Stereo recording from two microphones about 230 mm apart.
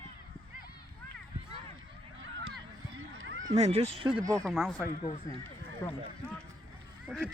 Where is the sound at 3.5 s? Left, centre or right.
Right.